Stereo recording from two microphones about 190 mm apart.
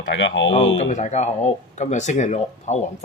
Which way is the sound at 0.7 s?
40° left (ahead or behind).